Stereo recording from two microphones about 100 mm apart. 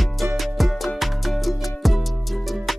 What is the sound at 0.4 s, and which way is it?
Music, centre (ahead or behind).